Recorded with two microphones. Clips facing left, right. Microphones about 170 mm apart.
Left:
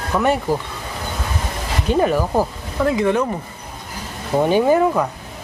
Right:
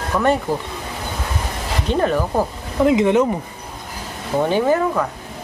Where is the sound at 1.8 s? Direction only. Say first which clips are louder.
Left 2 dB; 10° left (ahead or behind).